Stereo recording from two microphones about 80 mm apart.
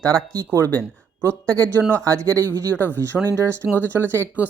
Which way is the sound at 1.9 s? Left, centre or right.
Right.